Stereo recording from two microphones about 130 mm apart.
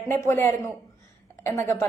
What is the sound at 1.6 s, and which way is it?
Speech, 20° left (ahead or behind).